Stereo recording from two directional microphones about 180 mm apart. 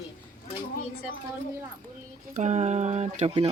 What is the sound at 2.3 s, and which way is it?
Speech, 40° right (ahead or behind).